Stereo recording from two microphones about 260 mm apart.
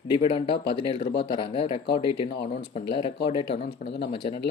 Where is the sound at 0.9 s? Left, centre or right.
Left.